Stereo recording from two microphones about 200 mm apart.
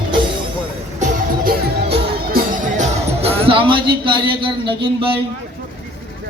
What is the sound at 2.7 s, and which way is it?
Music, 35° right (ahead or behind).